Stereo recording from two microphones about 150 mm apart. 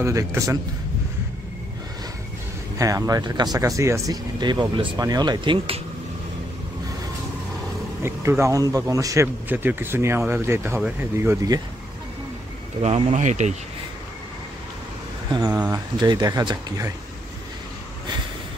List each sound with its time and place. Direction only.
0.0 s speech: 20° right (ahead or behind)
2.8 s speech: 25° right (ahead or behind)
8.0 s speech: 15° right (ahead or behind)
12.8 s speech: 50° right (ahead or behind)
15.3 s speech: 25° right (ahead or behind)